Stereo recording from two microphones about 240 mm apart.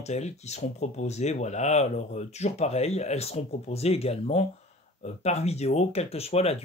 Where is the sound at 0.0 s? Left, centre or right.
Left.